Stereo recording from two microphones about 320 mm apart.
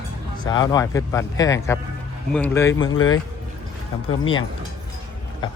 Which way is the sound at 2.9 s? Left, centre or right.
Left.